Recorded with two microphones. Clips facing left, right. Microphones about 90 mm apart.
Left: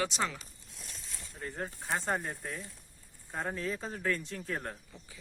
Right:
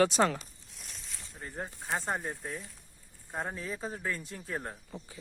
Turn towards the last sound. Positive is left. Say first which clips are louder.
# even
turn(degrees=-10)  # may be behind; listen again after turning